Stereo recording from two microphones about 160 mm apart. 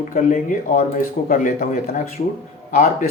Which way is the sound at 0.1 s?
55° left (ahead or behind).